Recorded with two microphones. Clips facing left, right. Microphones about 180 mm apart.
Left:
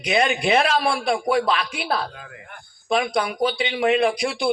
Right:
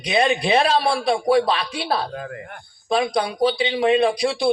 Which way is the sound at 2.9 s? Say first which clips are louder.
Right 1 dB; 30° right (ahead or behind).